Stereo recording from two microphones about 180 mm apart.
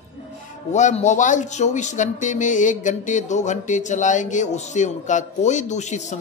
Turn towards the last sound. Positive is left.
turn(degrees=40)  # may be behind; listen again after turning